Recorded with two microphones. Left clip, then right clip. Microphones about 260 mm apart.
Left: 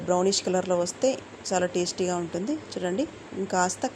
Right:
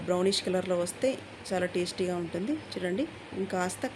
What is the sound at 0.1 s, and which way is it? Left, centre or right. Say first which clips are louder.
Speech: left 4 dB; centre.